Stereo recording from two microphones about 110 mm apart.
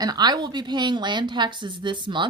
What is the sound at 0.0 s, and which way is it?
A woman's voice, 40° right (ahead or behind).